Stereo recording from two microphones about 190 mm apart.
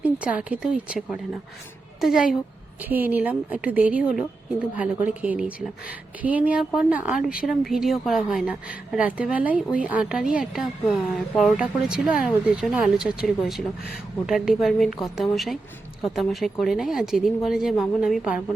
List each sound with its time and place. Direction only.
0.0 s a woman's voice: 5° right (ahead or behind)